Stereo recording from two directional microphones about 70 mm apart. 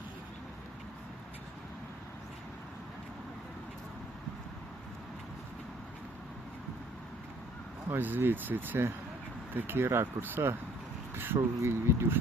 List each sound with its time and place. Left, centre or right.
7.9 s speech: right